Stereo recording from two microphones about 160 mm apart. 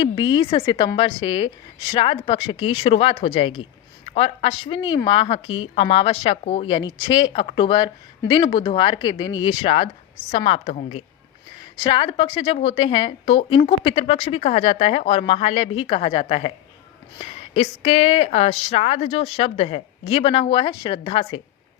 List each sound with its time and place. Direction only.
0.0 s speech: 30° left (ahead or behind)
0.6 s speech: 25° left (ahead or behind); by 11.0 s 45° left (ahead or behind)
11.8 s speech: 30° left (ahead or behind)